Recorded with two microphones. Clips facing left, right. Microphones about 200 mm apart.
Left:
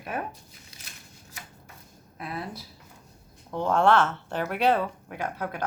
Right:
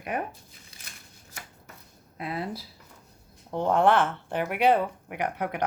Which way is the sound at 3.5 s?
20° right (ahead or behind).